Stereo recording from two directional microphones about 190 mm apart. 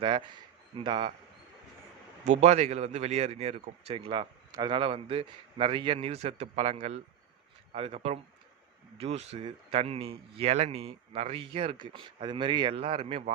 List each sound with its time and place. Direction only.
0.0 s a man's voice: 25° right (ahead or behind)
2.2 s a man's voice: 40° right (ahead or behind)